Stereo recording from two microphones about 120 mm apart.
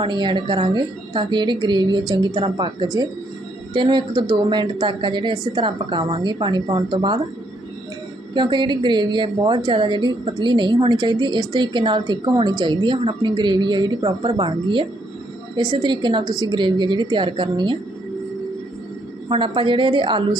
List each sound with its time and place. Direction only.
0.0 s a woman's voice: 40° right (ahead or behind)
8.3 s a woman's voice: 40° right (ahead or behind)
19.3 s a woman's voice: 45° right (ahead or behind)